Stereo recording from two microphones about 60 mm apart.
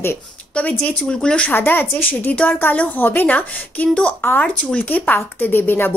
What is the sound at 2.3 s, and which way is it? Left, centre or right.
A woman's voice, left.